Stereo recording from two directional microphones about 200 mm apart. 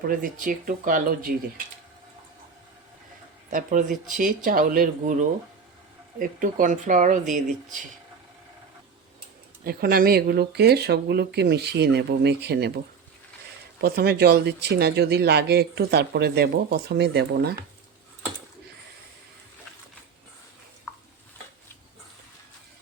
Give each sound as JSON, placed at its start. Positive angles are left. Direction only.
{"t": 0.1, "sound": "speech", "side_deg": -40}
{"t": 3.5, "sound": "speech", "side_deg": -40}
{"t": 6.1, "sound": "speech", "side_deg": -40}
{"t": 9.6, "sound": "speech", "side_deg": -45}
{"t": 13.8, "sound": "speech", "side_deg": -50}